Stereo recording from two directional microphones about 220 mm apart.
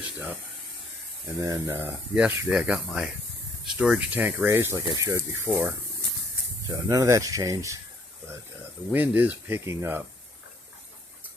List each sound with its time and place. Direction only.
1.4 s speech: 15° right (ahead or behind)
8.9 s speech: 10° right (ahead or behind)